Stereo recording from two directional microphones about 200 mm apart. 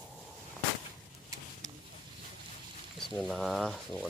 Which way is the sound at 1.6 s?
20° right (ahead or behind).